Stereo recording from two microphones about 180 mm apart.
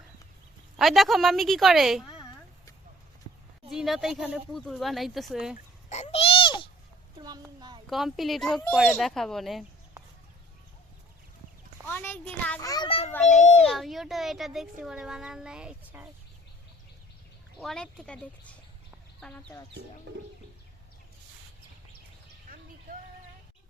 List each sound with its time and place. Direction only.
0.8 s speech: centre (ahead or behind)
3.7 s speech: centre (ahead or behind)
5.9 s babbling: 35° left (ahead or behind)
7.2 s speech: 25° right (ahead or behind)
7.9 s speech: centre (ahead or behind)
11.9 s a sound: 10° left (ahead or behind)
12.6 s a child's voice: 25° left (ahead or behind)
13.6 s speech: centre (ahead or behind)
17.6 s speech: 5° left (ahead or behind)
20.1 s speech: 70° right (ahead or behind)